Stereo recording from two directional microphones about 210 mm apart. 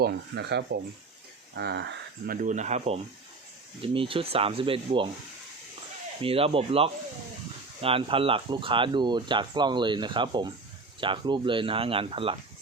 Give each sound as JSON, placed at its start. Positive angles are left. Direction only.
{"t": 0.0, "sound": "speech", "side_deg": -55}
{"t": 6.2, "sound": "speech", "side_deg": -25}